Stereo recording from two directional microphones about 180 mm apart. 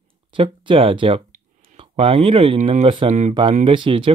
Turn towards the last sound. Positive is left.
turn(degrees=-30)  # may be behind; listen again after turning